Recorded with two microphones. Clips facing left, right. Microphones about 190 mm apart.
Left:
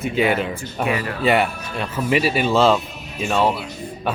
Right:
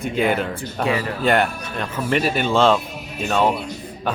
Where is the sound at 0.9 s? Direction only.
30° right (ahead or behind).